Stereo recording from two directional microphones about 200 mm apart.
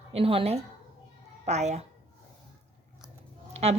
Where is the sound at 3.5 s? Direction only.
30° right (ahead or behind).